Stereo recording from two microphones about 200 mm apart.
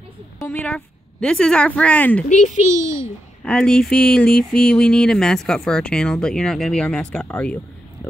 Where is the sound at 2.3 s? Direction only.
35° left (ahead or behind).